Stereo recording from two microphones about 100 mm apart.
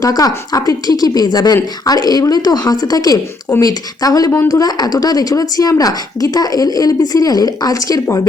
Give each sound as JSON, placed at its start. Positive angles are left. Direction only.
{"t": 0.0, "sound": "speech", "side_deg": 40}